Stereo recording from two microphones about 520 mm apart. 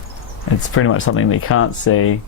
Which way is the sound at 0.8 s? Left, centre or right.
Left.